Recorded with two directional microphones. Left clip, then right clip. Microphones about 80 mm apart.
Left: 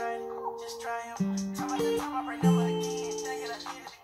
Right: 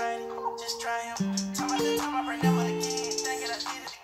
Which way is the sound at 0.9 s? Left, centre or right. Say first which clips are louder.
Right 2 dB; right.